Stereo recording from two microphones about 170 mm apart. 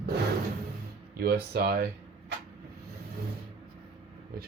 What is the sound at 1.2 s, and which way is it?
Speech, 65° right (ahead or behind).